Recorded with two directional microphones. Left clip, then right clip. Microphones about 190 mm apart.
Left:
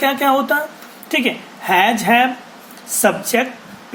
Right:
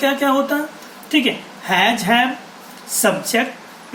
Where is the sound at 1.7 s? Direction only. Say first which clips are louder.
Left 2 dB; 40° left (ahead or behind).